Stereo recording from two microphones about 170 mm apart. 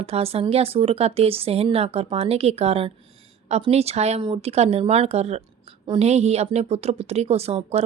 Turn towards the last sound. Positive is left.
turn(degrees=-40)  # may be behind; listen again after turning